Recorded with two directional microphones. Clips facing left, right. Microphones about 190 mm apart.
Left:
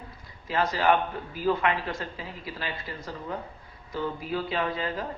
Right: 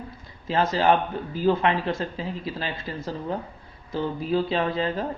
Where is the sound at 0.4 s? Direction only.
25° right (ahead or behind).